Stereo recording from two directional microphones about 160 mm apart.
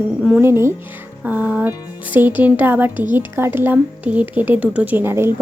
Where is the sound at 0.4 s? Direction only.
15° right (ahead or behind).